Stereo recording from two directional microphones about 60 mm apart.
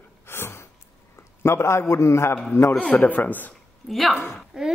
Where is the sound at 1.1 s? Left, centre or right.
Left.